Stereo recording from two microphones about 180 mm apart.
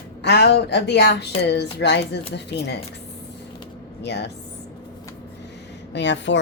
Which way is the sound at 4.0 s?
70° left (ahead or behind).